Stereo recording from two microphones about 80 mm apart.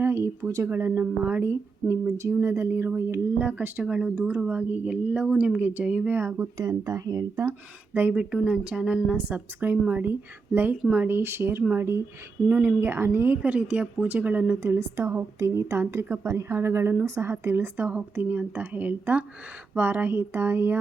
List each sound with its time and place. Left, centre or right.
0.0 s speech: right
0.7 s a woman's voice: right
3.8 s a woman's voice: centre
5.5 s a woman's voice: right
6.7 s speech: right
8.1 s a woman's voice: centre; by 12.0 s right
12.5 s a woman's voice: right